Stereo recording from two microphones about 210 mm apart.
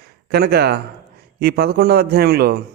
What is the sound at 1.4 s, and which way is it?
A man's voice, 50° right (ahead or behind).